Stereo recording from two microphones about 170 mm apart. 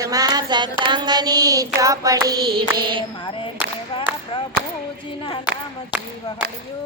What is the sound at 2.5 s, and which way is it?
Mantra, 65° right (ahead or behind).